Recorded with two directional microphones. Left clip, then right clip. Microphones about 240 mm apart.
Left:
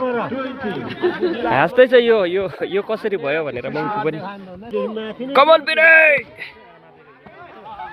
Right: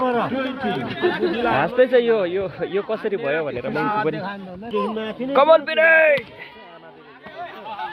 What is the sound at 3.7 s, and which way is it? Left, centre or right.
Speech, right.